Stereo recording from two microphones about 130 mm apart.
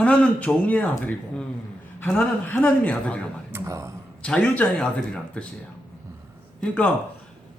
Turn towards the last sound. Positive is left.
turn(degrees=10)  # may be behind; listen again after turning